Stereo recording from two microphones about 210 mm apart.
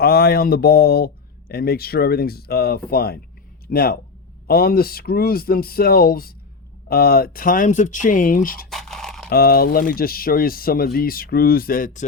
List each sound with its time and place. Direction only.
0.0 s a man's voice: 50° left (ahead or behind)
8.7 s a sound: centre (ahead or behind)
9.3 s a man's voice: 45° left (ahead or behind)